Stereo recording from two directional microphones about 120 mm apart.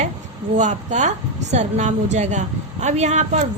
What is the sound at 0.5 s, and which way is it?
A woman's voice, 90° right.